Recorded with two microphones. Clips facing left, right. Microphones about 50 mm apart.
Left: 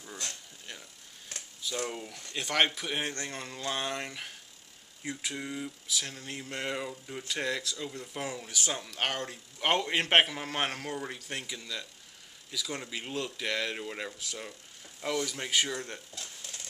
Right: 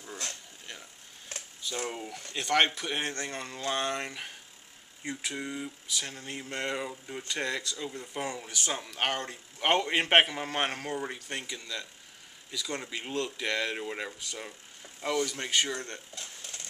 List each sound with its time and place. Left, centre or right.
1.6 s speech: centre
2.4 s speech: centre